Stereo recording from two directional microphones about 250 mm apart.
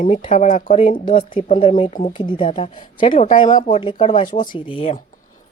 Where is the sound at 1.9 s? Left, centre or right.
Left.